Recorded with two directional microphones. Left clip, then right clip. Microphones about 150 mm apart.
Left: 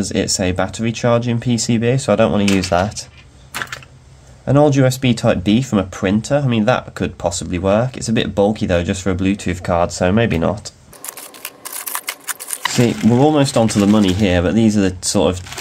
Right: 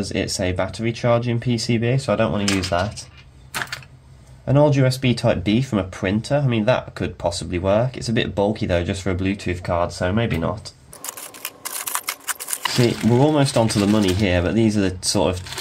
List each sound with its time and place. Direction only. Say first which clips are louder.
0.0 s speech: left 5 dB; 45° left (ahead or behind); by 3.1 s 65° left (ahead or behind)
4.5 s speech: left 4 dB; 45° left (ahead or behind); by 10.7 s 65° left (ahead or behind)
11.1 s camera: left 1 dB; centre (ahead or behind)
13.2 s speech: left 4 dB; 35° left (ahead or behind)